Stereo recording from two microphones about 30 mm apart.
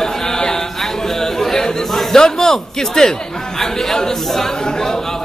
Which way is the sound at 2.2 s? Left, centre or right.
Left.